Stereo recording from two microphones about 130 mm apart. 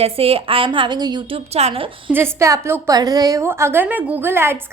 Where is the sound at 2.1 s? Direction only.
20° right (ahead or behind).